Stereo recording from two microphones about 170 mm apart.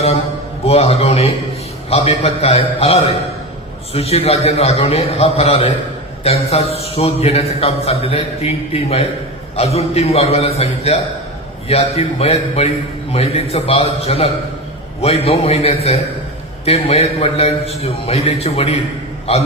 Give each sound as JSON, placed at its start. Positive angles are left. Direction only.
{"t": 0.6, "sound": "a man's voice", "side_deg": 35}